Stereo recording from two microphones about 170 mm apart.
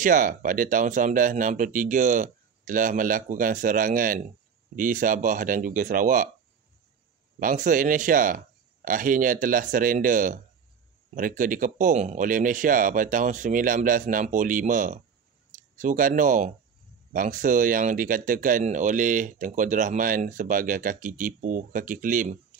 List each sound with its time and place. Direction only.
0.0 s speech: 50° right (ahead or behind)
7.3 s speech: 50° right (ahead or behind)